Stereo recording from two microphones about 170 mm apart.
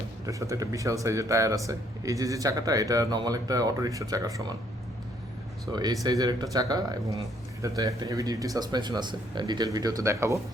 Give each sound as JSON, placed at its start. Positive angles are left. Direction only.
{"t": 0.3, "sound": "speech", "side_deg": -20}
{"t": 5.7, "sound": "speech", "side_deg": -20}